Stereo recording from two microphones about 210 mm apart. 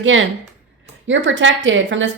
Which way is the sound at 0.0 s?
65° right (ahead or behind).